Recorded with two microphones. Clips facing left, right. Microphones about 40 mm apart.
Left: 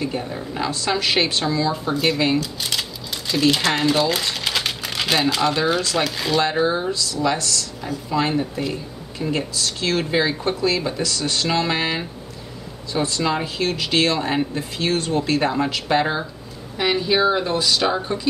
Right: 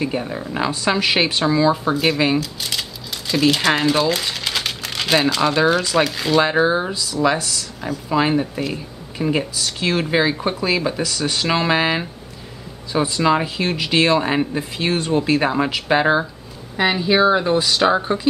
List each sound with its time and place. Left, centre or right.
0.0 s speech: centre
6.3 s speech: centre